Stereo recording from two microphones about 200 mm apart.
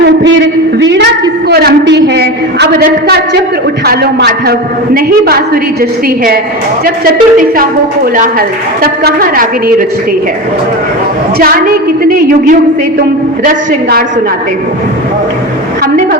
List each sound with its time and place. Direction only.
0.8 s a sound: 65° right (ahead or behind)
1.5 s a woman's voice: 55° right (ahead or behind)
6.8 s a woman's voice: 45° right (ahead or behind)
11.3 s a woman's voice: 45° right (ahead or behind)